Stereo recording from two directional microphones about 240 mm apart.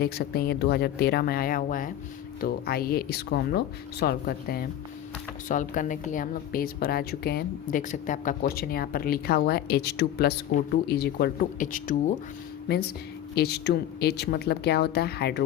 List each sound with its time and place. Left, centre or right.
0.0 s a woman's voice: left
13.3 s speech: left